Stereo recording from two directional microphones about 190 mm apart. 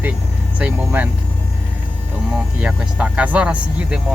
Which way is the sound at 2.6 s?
5° right (ahead or behind).